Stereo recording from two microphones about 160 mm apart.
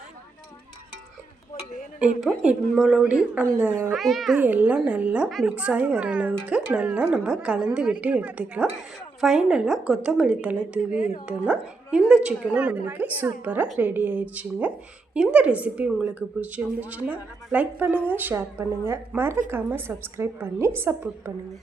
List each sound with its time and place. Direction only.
2.4 s a woman's voice: 5° right (ahead or behind)
3.9 s a woman's voice: centre (ahead or behind)
4.4 s a woman's voice: 10° right (ahead or behind)
10.9 s speech: 60° left (ahead or behind)
11.3 s a woman's voice: 5° right (ahead or behind)